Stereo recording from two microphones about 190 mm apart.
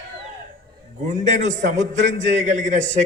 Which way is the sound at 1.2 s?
40° right (ahead or behind).